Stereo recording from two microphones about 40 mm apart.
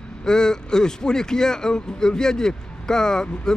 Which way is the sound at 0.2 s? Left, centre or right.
Centre.